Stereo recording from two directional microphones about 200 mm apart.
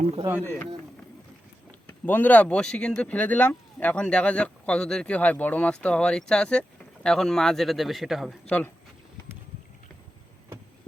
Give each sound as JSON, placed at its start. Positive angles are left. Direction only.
{"t": 0.0, "sound": "speech", "side_deg": -30}
{"t": 0.3, "sound": "speech", "side_deg": 10}
{"t": 2.0, "sound": "speech", "side_deg": 10}